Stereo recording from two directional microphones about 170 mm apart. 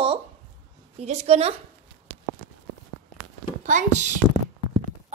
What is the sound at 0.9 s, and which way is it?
Speech, 40° right (ahead or behind).